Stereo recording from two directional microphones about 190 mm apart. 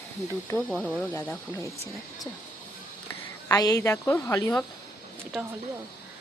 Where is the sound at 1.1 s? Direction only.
15° left (ahead or behind).